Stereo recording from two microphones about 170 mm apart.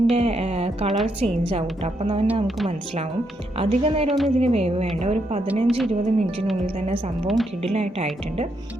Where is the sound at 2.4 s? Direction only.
Centre (ahead or behind).